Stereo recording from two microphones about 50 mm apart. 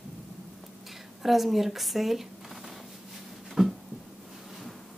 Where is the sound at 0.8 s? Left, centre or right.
Centre.